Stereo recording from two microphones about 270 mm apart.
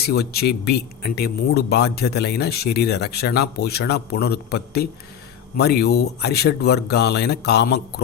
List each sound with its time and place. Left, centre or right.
0.0 s speech: left